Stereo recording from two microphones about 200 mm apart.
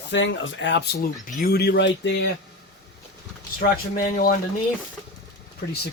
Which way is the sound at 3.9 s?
45° left (ahead or behind).